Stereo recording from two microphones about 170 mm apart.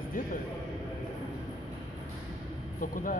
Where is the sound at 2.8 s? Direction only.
55° left (ahead or behind).